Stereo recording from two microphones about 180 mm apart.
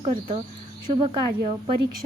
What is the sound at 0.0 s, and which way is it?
A woman's voice, 30° right (ahead or behind).